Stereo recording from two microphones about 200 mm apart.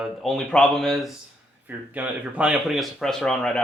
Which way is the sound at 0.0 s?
Centre (ahead or behind).